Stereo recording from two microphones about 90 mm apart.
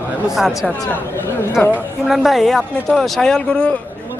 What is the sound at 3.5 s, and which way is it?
Speech, 15° left (ahead or behind).